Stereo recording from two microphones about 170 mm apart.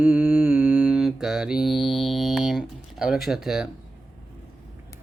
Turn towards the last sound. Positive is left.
turn(degrees=-5)  # may be behind; listen again after turning